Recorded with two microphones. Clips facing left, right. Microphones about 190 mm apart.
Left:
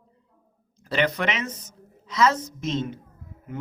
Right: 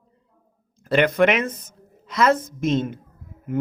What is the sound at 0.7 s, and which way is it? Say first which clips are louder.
A woman's voice: right 6 dB; 50° right (ahead or behind).